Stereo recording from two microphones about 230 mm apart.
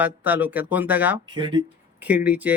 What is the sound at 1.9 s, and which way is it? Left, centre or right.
Speech, centre.